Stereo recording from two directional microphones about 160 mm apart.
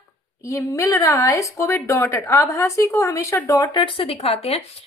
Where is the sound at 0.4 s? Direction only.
20° left (ahead or behind).